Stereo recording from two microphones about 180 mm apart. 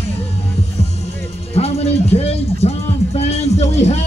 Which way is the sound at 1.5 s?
35° left (ahead or behind).